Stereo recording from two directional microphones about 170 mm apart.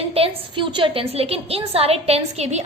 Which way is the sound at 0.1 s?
30° right (ahead or behind).